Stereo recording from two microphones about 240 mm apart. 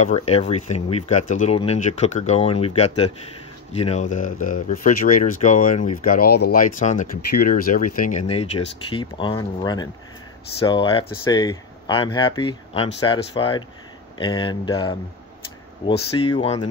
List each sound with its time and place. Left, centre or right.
0.0 s speech: left
8.3 s speech: left
16.3 s speech: left